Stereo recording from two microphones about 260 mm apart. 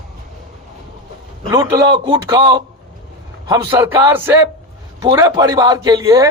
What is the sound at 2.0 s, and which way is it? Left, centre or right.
A man's voice, centre.